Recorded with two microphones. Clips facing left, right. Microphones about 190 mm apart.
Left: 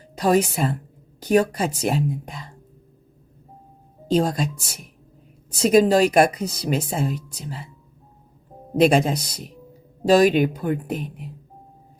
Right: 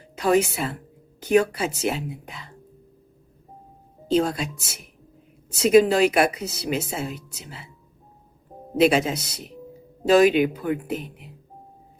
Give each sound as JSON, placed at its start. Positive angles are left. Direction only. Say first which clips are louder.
{"t": 0.2, "sound": "speech", "louder": "left 1 dB", "side_deg": 40}
{"t": 4.1, "sound": "speech", "louder": "left 1 dB", "side_deg": 40}
{"t": 8.8, "sound": "speech", "louder": "left 2 dB", "side_deg": 45}